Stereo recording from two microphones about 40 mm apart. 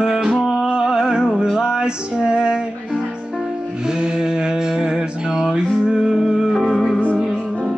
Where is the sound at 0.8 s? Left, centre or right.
Centre.